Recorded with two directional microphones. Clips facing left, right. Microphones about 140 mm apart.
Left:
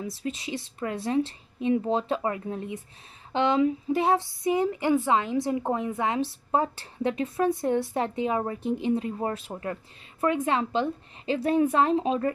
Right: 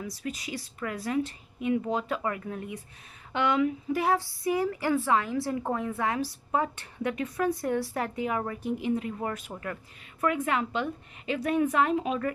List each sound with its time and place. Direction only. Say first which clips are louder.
0.0 s a woman's voice: left 3 dB; 25° left (ahead or behind)